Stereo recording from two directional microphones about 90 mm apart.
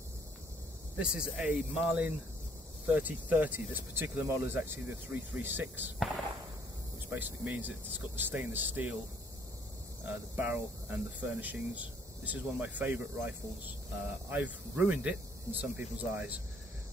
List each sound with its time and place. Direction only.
0.9 s speech: 10° right (ahead or behind)
7.1 s speech: 20° right (ahead or behind)
10.0 s speech: 20° right (ahead or behind)
14.3 s speech: 15° right (ahead or behind)